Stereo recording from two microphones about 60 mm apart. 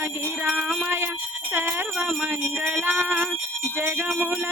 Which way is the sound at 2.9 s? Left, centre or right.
Right.